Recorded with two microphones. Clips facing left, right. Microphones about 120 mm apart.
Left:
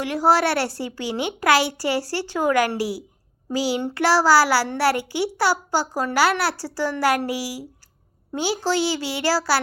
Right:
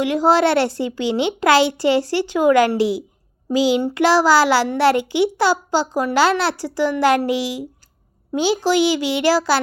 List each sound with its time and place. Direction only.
0.0 s a child's voice: 20° right (ahead or behind)